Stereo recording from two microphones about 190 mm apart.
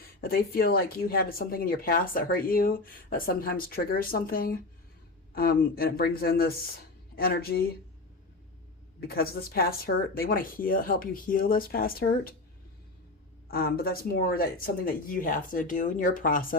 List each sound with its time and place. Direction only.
0.2 s speech: 55° left (ahead or behind)
9.0 s speech: 55° left (ahead or behind)
13.5 s speech: 50° left (ahead or behind)